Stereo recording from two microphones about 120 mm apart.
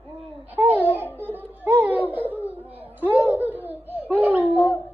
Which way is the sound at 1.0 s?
15° left (ahead or behind).